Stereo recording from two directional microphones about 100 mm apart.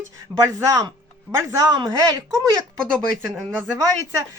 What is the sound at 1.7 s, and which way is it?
Speech, 45° right (ahead or behind).